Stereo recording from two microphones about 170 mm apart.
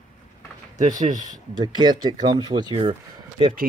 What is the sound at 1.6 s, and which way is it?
Speech, 25° right (ahead or behind).